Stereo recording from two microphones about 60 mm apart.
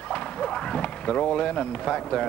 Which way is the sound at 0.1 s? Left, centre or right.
Centre.